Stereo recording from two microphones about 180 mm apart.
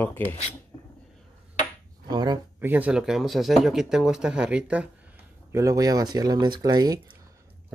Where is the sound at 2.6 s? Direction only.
10° right (ahead or behind).